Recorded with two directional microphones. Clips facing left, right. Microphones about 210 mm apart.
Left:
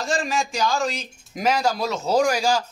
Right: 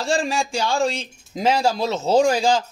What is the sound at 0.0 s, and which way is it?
Speech, 30° right (ahead or behind).